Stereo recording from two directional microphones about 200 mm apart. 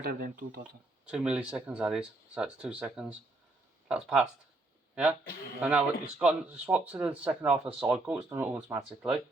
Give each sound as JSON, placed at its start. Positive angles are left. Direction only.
{"t": 0.0, "sound": "speech", "side_deg": -45}
{"t": 1.0, "sound": "speech", "side_deg": -5}
{"t": 5.5, "sound": "speech", "side_deg": -5}